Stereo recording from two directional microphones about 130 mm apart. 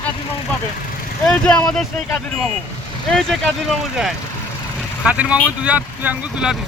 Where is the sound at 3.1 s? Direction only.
5° left (ahead or behind).